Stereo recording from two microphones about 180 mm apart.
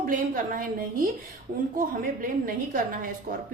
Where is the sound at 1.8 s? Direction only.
50° right (ahead or behind).